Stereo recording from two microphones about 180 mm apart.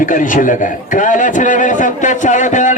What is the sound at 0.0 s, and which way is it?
A man's voice, 45° left (ahead or behind).